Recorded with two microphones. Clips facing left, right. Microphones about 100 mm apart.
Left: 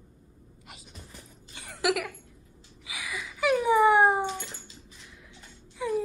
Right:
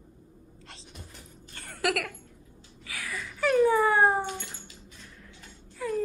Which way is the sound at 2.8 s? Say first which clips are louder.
Even; 15° left (ahead or behind).